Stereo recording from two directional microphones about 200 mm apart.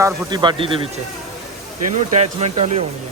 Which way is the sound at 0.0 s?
20° right (ahead or behind).